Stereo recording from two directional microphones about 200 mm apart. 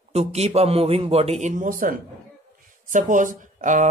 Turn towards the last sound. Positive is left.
turn(degrees=-40)  # may be behind; listen again after turning